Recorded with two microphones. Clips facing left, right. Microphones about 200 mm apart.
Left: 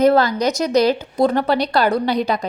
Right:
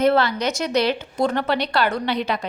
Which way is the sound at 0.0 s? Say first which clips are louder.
Left 4 dB; 40° left (ahead or behind).